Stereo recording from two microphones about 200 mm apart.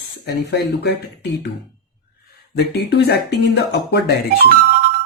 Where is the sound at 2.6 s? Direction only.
55° left (ahead or behind).